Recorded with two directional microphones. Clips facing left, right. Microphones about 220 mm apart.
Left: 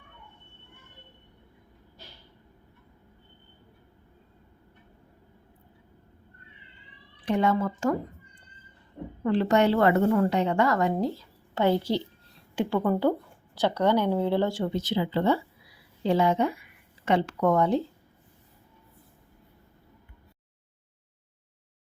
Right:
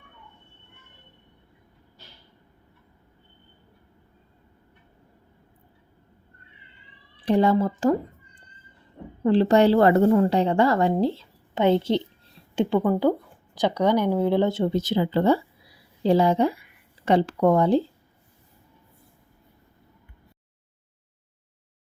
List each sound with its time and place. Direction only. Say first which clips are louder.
7.3 s a woman's voice: right 5 dB; 35° right (ahead or behind)
9.2 s a woman's voice: right 5 dB; 30° right (ahead or behind)
12.8 s a woman's voice: right 3 dB; 10° right (ahead or behind)
14.7 s a woman's voice: right 4 dB; 45° right (ahead or behind)